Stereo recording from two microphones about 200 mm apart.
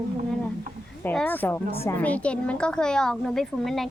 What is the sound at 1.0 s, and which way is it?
A child's voice, 10° left (ahead or behind).